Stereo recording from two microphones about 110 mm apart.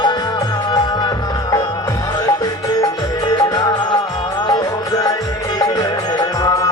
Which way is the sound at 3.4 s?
40° left (ahead or behind).